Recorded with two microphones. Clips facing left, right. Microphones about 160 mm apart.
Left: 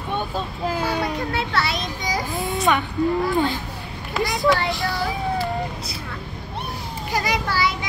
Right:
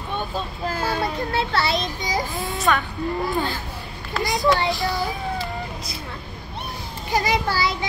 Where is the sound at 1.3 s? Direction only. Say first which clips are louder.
Right 2 dB; 30° right (ahead or behind).